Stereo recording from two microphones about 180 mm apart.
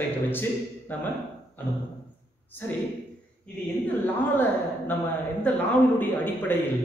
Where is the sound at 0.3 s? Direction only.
10° left (ahead or behind).